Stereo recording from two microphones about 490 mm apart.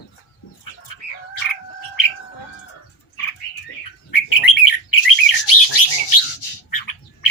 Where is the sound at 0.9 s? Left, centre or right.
Left.